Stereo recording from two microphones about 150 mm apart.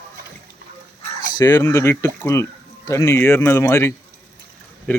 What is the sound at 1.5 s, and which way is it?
Speech, 20° left (ahead or behind).